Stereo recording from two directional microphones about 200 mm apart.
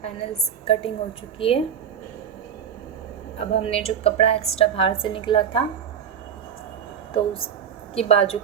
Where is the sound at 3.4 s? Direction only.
30° left (ahead or behind).